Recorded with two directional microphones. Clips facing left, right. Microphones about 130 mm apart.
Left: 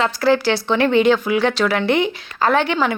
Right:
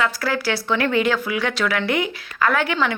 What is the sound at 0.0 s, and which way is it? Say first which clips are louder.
A woman's voice: left 6 dB; 30° left (ahead or behind).